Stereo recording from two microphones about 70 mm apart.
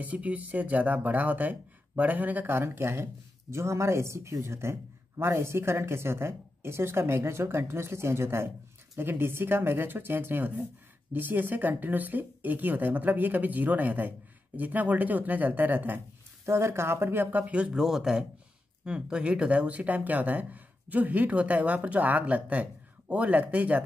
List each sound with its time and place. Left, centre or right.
0.0 s speech: right
16.4 s speech: right